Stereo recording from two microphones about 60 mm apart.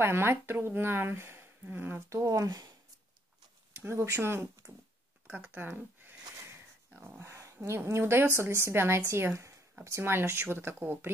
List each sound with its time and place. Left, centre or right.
0.0 s speech: right
3.7 s a woman's voice: right
5.2 s speech: right
7.2 s dog: right
7.5 s a woman's voice: right